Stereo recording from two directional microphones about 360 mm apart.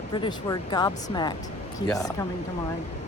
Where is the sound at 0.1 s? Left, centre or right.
Centre.